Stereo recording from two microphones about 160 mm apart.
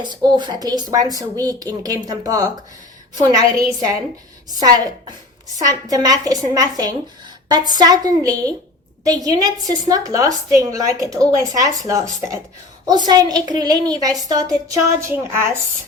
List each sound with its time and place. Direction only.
0.0 s a woman's voice: 25° right (ahead or behind)
4.6 s a woman's voice: 25° right (ahead or behind)